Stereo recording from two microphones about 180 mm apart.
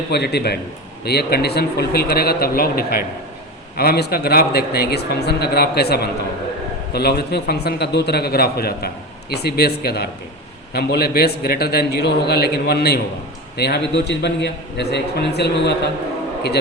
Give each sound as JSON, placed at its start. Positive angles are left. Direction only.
{"t": 0.1, "sound": "a man's voice", "side_deg": 65}